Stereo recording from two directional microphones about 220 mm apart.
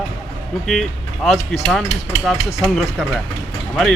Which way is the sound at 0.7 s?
Centre (ahead or behind).